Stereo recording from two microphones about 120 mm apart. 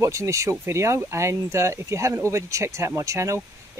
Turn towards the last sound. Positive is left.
turn(degrees=-25)  # may be behind; listen again after turning